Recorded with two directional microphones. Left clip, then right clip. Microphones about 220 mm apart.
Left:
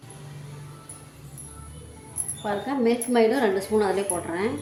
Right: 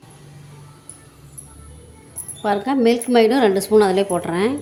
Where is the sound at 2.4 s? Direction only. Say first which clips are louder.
Right 7 dB; 50° right (ahead or behind).